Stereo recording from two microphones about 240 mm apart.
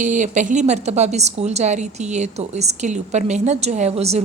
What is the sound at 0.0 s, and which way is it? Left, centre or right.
A woman's voice, right.